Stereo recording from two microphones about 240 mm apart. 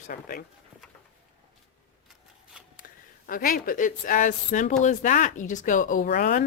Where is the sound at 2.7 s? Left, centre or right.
Left.